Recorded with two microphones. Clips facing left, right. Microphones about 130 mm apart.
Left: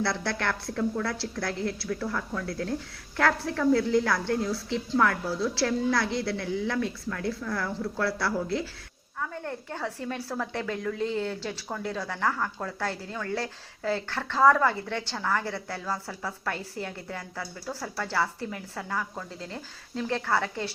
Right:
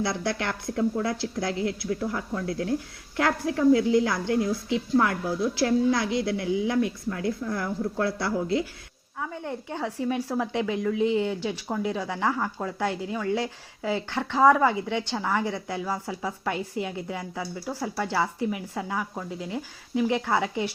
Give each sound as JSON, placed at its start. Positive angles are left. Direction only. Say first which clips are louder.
{"t": 0.0, "sound": "speech", "louder": "right 1 dB", "side_deg": -15}